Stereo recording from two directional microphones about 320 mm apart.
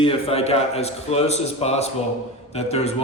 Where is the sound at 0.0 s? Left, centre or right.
Centre.